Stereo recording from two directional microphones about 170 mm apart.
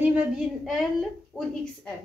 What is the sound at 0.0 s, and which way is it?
A child's voice, 10° right (ahead or behind).